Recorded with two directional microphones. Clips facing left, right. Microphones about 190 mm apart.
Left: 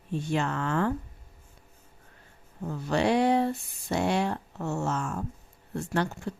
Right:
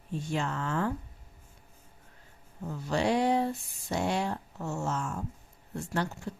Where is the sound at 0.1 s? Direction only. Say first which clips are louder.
Left 4 dB; 65° left (ahead or behind).